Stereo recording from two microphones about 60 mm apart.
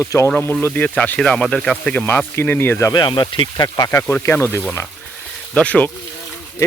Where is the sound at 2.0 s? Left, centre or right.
Left.